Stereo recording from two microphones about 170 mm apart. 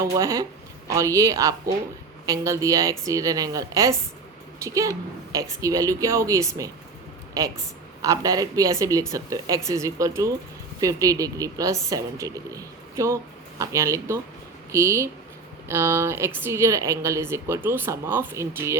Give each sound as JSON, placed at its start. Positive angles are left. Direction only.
{"t": 0.0, "sound": "a woman's voice", "side_deg": -20}